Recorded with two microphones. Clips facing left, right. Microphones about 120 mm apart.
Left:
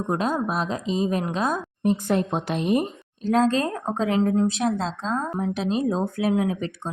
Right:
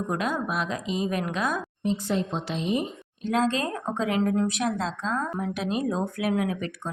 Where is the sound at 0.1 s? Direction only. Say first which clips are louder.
Left 5 dB; 35° left (ahead or behind).